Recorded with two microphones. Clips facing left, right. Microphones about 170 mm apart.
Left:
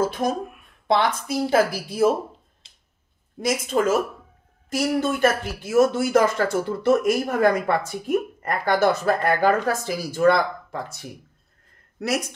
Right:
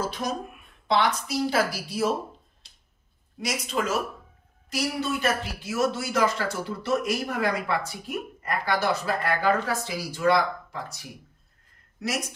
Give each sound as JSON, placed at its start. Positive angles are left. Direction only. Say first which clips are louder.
{"t": 0.0, "sound": "speech", "louder": "left 6 dB", "side_deg": 50}
{"t": 3.3, "sound": "speech", "louder": "left 7 dB", "side_deg": 50}